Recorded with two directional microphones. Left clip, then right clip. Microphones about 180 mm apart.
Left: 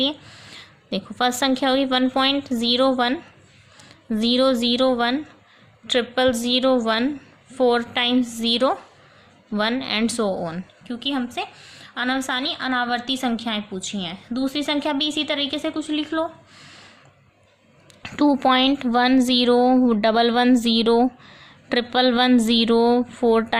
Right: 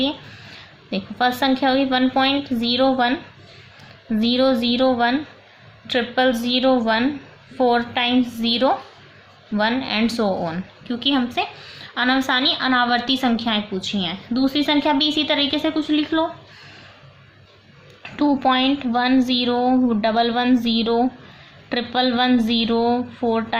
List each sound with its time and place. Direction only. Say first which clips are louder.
0.0 s a woman's voice: even; 55° left (ahead or behind)
18.0 s a woman's voice: even; 65° left (ahead or behind)